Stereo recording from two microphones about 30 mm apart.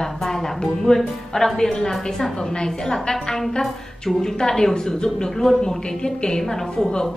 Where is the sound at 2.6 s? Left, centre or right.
Left.